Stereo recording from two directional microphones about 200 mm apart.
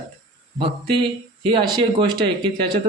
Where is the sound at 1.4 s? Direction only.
25° right (ahead or behind).